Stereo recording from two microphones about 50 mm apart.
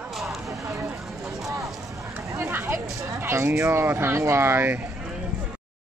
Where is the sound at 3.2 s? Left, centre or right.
Right.